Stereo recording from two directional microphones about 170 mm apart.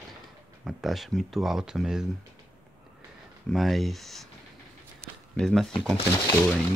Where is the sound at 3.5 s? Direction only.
Centre (ahead or behind).